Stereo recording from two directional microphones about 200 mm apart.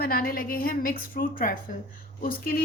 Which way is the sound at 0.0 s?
50° left (ahead or behind).